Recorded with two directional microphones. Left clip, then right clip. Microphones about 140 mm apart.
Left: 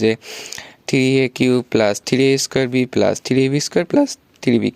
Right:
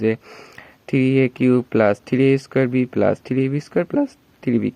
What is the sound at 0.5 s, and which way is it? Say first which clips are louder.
Speech: left 3 dB; 45° left (ahead or behind).